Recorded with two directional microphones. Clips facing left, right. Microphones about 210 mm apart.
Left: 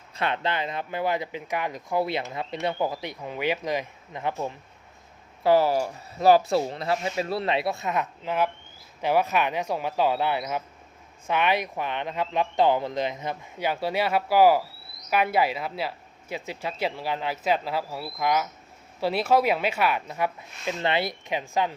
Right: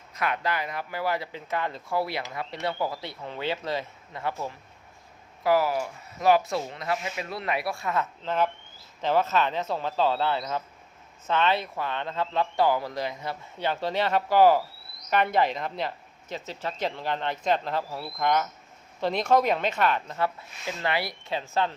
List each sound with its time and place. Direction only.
0.1 s speech: 25° left (ahead or behind)